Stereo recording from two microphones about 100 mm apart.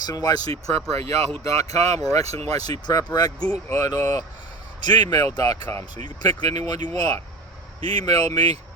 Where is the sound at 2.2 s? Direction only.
90° right.